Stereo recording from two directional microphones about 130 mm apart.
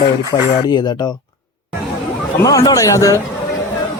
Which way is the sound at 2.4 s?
25° left (ahead or behind).